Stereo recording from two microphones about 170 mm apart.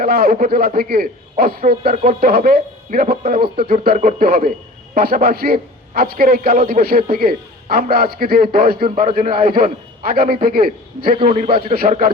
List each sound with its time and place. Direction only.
0.0 s a man's voice: 60° right (ahead or behind)
11.1 s a man's voice: 35° right (ahead or behind)
11.7 s a man's voice: 60° right (ahead or behind)